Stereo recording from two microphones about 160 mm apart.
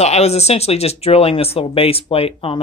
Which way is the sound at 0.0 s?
40° left (ahead or behind).